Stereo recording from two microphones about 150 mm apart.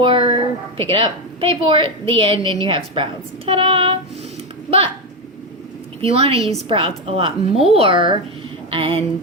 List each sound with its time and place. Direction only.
0.0 s a woman's voice: 35° right (ahead or behind)
6.0 s a woman's voice: 40° right (ahead or behind)
6.4 s a woman's voice: centre (ahead or behind)
6.7 s a woman's voice: 35° right (ahead or behind)